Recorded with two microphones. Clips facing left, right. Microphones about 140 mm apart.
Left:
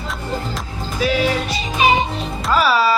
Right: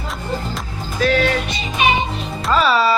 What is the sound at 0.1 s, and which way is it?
Music, 5° left (ahead or behind).